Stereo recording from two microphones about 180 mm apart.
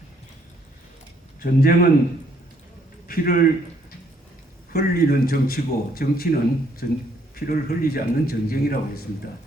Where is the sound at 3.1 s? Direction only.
55° left (ahead or behind).